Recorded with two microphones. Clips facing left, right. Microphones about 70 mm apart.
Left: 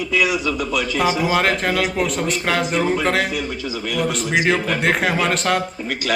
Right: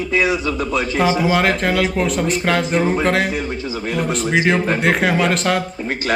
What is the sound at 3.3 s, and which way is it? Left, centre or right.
A man's voice, right.